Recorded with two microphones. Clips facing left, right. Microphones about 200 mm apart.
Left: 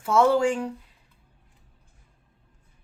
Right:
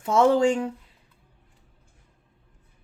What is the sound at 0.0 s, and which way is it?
Speech, 20° right (ahead or behind).